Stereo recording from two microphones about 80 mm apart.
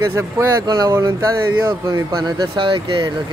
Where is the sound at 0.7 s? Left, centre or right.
Right.